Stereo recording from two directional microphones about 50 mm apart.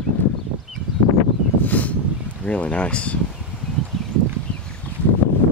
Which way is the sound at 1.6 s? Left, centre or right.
Left.